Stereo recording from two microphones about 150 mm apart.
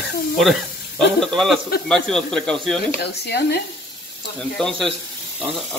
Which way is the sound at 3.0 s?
90° left.